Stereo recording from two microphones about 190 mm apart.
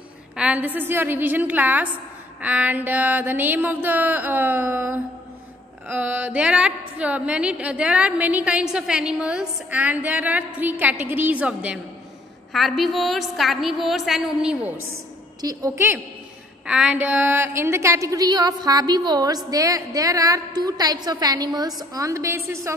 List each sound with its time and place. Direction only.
0.4 s a woman's voice: 10° right (ahead or behind)